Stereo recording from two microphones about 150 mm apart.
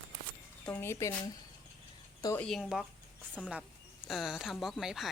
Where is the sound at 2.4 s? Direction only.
5° left (ahead or behind).